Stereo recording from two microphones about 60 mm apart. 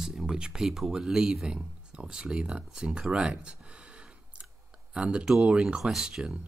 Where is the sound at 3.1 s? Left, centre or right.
Centre.